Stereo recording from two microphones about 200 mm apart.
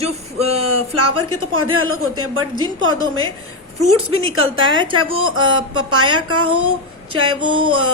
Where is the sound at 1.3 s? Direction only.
90° right.